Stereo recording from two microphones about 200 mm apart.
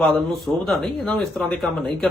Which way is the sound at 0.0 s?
Centre (ahead or behind).